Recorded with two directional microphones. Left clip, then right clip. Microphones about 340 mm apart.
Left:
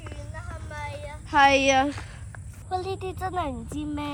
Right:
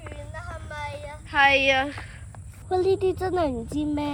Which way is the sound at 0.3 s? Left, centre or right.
Centre.